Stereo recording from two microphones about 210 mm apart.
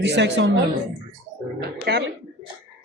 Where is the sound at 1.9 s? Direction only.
50° right (ahead or behind).